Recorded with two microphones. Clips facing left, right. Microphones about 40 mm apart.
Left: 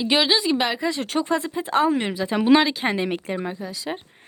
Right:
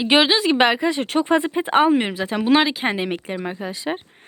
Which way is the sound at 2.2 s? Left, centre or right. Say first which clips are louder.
Left 2 dB; centre.